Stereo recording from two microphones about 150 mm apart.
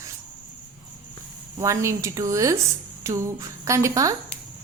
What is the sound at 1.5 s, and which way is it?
A woman's voice, 20° right (ahead or behind).